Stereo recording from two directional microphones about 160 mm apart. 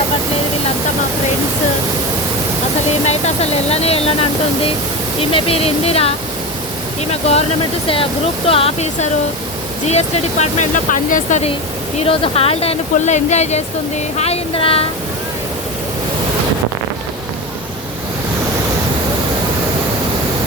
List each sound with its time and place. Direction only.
3.1 s speech: 40° left (ahead or behind)
8.4 s speech: 35° left (ahead or behind)